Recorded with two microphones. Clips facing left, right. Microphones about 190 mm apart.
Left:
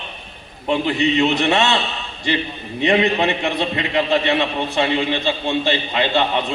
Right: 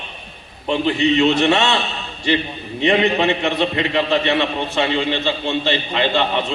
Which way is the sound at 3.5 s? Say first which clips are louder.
Right 2 dB; 20° left (ahead or behind).